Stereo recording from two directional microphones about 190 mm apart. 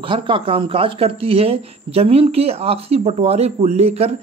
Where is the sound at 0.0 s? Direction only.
25° right (ahead or behind).